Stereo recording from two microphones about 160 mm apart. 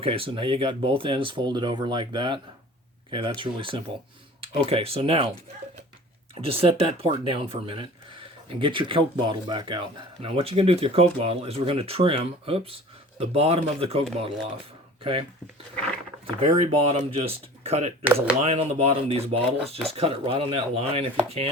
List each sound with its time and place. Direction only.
0.0 s speech: 35° right (ahead or behind)
6.4 s speech: 35° right (ahead or behind)
15.0 s speech: 35° right (ahead or behind)
16.4 s speech: 40° right (ahead or behind)